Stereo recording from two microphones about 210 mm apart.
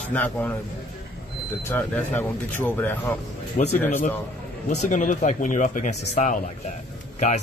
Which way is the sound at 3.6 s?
35° left (ahead or behind).